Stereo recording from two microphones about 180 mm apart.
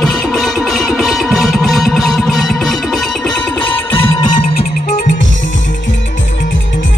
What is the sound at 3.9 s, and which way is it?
Music, 25° left (ahead or behind).